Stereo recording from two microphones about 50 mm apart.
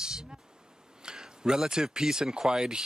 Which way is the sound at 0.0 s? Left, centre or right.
Centre.